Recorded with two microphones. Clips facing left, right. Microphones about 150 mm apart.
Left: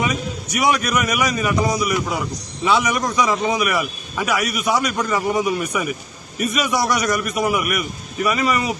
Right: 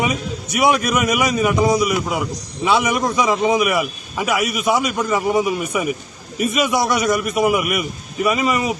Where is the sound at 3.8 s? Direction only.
5° right (ahead or behind).